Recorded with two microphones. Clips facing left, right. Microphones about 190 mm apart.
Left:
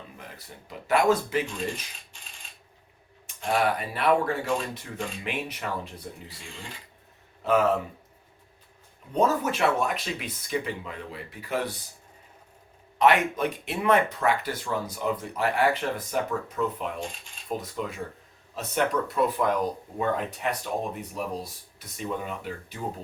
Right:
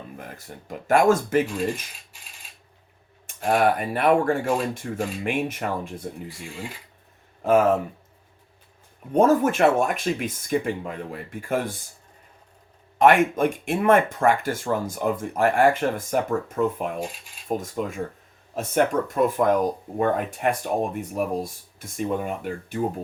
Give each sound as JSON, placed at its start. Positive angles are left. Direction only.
{"t": 0.2, "sound": "speech", "side_deg": -50}
{"t": 3.2, "sound": "speech", "side_deg": -50}
{"t": 7.4, "sound": "speech", "side_deg": -50}
{"t": 9.1, "sound": "speech", "side_deg": -50}
{"t": 13.0, "sound": "speech", "side_deg": -50}